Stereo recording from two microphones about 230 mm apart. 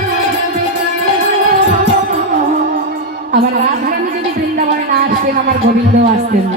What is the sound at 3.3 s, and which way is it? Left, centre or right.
Music, right.